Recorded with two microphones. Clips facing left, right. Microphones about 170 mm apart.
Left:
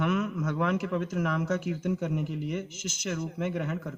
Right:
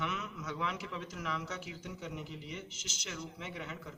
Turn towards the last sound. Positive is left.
turn(degrees=50)  # may be behind; listen again after turning